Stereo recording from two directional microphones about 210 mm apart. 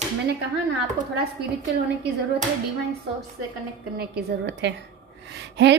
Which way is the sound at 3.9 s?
50° right (ahead or behind).